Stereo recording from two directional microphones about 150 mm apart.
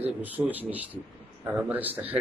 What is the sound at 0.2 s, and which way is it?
Speech, 10° right (ahead or behind).